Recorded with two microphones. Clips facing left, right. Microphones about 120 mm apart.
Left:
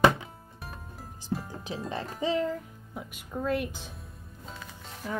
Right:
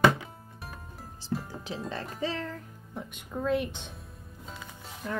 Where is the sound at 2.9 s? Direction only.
5° left (ahead or behind).